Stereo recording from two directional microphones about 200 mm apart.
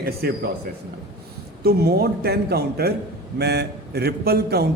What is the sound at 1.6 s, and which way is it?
A man's voice, 50° right (ahead or behind).